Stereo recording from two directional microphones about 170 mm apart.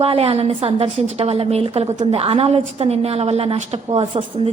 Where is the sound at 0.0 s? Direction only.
35° right (ahead or behind).